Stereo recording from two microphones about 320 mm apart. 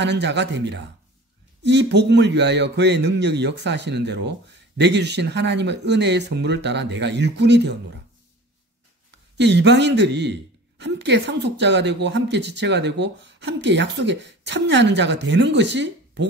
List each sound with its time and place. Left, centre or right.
0.0 s a man's voice: right
9.1 s a man's voice: right